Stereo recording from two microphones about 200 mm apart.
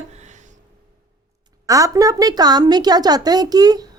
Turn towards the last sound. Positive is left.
turn(degrees=-20)  # may be behind; listen again after turning